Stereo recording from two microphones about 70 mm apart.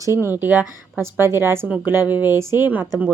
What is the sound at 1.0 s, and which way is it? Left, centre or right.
Speech, right.